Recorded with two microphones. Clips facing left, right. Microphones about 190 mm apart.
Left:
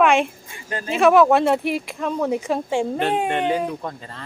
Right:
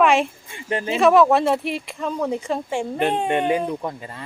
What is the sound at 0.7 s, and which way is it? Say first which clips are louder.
Speech: right 4 dB; 25° right (ahead or behind).